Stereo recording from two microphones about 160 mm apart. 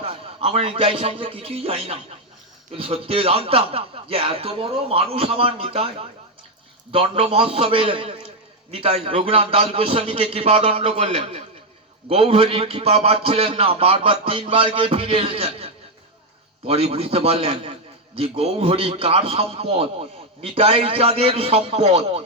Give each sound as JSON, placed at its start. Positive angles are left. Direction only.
{"t": 0.0, "sound": "a man's voice", "side_deg": -40}
{"t": 6.9, "sound": "a man's voice", "side_deg": -35}